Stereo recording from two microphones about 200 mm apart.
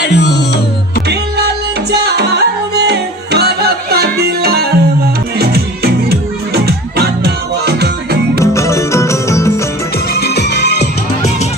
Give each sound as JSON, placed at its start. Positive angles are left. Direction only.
{"t": 0.0, "sound": "music", "side_deg": 60}
{"t": 1.0, "sound": "music", "side_deg": -55}
{"t": 8.4, "sound": "music", "side_deg": 15}
{"t": 10.2, "sound": "music", "side_deg": 55}